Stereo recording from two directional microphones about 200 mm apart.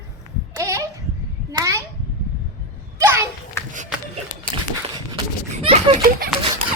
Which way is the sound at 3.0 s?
15° right (ahead or behind).